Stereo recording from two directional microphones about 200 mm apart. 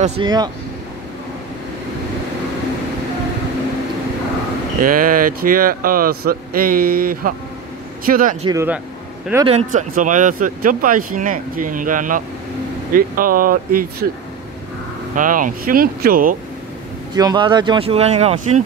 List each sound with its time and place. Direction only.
0.2 s speech: 20° right (ahead or behind)
4.8 s speech: 45° right (ahead or behind)
8.5 s speech: 10° right (ahead or behind)
9.5 s speech: 35° right (ahead or behind)
15.1 s speech: 40° right (ahead or behind)
17.1 s speech: 20° right (ahead or behind)